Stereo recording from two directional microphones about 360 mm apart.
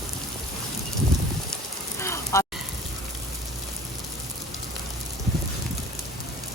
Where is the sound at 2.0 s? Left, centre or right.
Centre.